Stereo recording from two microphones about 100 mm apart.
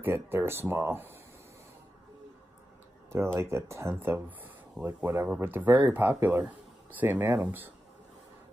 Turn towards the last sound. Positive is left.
turn(degrees=-20)  # may be behind; listen again after turning